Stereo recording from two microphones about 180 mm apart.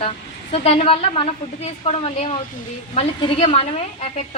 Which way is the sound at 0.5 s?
35° left (ahead or behind).